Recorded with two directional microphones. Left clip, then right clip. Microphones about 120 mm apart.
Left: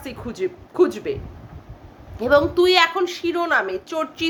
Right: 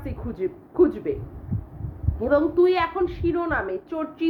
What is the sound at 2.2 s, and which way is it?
A woman's voice, 25° left (ahead or behind).